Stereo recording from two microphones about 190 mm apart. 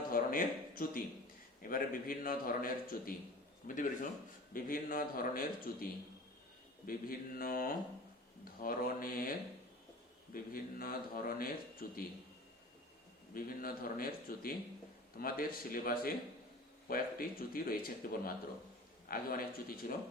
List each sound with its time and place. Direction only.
0.1 s a man's voice: 50° left (ahead or behind)
10.3 s a man's voice: 50° left (ahead or behind)
13.3 s a man's voice: 50° left (ahead or behind)